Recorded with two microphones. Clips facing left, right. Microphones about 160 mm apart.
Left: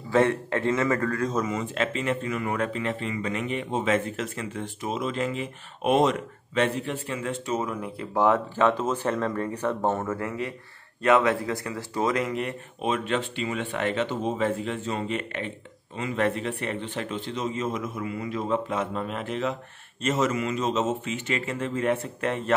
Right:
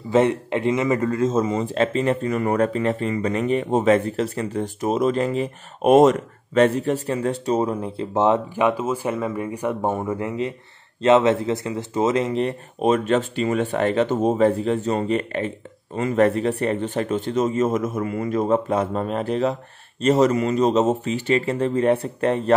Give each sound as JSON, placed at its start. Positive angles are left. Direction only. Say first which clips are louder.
{"t": 0.1, "sound": "a man's voice", "louder": "right 4 dB", "side_deg": -20}